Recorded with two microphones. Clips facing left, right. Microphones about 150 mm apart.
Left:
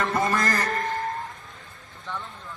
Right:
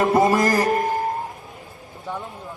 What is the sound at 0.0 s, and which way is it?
Music, 20° right (ahead or behind).